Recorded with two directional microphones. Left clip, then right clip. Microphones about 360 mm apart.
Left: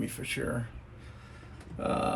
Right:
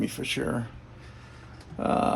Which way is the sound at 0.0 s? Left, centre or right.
Centre.